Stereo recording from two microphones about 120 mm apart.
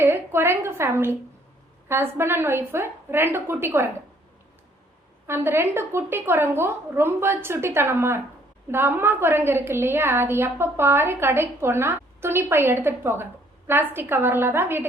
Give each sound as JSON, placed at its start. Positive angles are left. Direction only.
{"t": 0.0, "sound": "a woman's voice", "side_deg": -20}
{"t": 5.2, "sound": "a woman's voice", "side_deg": -20}